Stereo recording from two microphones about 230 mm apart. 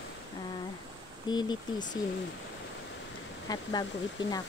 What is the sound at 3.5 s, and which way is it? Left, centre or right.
Speech, centre.